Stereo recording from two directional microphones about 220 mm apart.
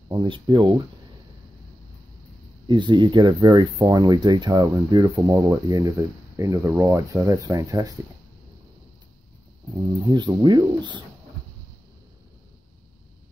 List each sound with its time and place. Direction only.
0.1 s speech: 20° right (ahead or behind)
2.6 s speech: 20° right (ahead or behind)
10.0 s speech: 20° right (ahead or behind)